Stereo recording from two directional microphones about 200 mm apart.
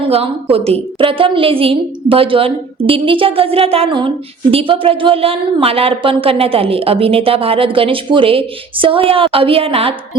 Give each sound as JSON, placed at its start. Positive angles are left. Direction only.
{"t": 0.0, "sound": "a woman's voice", "side_deg": -30}